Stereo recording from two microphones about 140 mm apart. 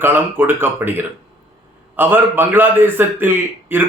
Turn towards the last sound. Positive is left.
turn(degrees=-15)  # may be behind; listen again after turning